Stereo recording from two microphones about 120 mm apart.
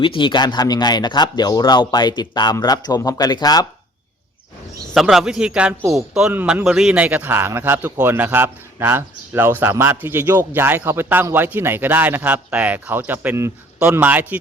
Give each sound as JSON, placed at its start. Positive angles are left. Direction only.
{"t": 0.0, "sound": "speech", "side_deg": 45}
{"t": 4.9, "sound": "a man's voice", "side_deg": 0}